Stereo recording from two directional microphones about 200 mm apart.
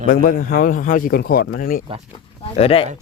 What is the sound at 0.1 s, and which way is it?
A man's voice, 45° left (ahead or behind).